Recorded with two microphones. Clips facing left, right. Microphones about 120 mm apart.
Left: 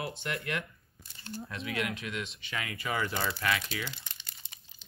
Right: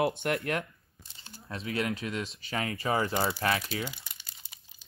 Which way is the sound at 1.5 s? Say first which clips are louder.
Right 4 dB; 35° right (ahead or behind).